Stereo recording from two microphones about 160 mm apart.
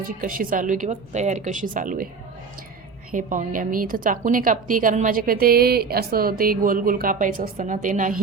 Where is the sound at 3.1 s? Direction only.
55° right (ahead or behind).